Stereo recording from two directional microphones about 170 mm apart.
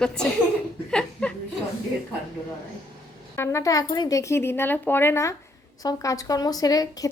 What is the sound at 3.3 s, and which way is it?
Speech, 20° left (ahead or behind).